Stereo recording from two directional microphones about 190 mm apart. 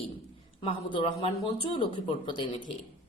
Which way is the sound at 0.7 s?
25° left (ahead or behind).